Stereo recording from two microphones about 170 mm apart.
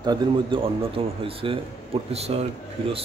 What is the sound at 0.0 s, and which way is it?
Speech, 25° right (ahead or behind).